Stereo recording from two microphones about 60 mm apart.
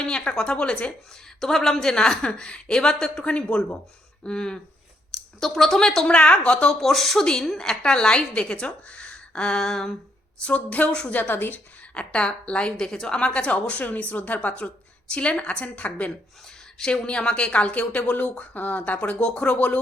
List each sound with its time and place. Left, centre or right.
0.0 s a woman's voice: centre
6.7 s a woman's voice: centre
10.4 s speech: left
11.1 s a woman's voice: left
11.9 s speech: centre
16.7 s speech: centre